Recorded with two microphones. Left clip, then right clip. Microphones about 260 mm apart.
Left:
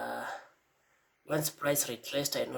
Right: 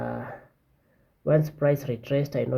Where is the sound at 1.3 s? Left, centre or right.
Centre.